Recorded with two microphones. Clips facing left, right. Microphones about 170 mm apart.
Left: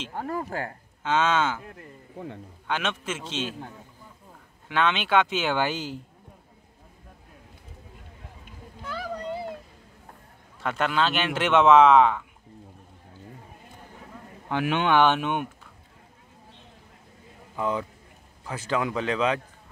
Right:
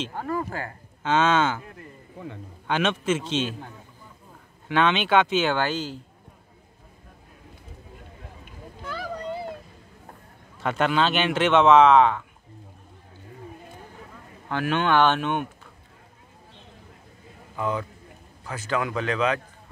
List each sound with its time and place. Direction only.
0.0 s speech: 20° left (ahead or behind)
1.0 s speech: 5° left (ahead or behind)
2.6 s speech: 5° left (ahead or behind)
4.6 s speech: 5° left (ahead or behind)
8.8 s a sound: 15° left (ahead or behind)
10.6 s speech: centre (ahead or behind)
14.5 s speech: 15° left (ahead or behind)
18.5 s speech: 25° left (ahead or behind)